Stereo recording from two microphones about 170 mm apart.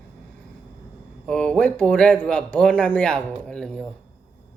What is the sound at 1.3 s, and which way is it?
Speech, 5° left (ahead or behind).